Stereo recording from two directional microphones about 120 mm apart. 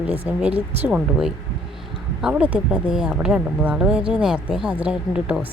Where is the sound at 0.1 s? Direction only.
15° right (ahead or behind).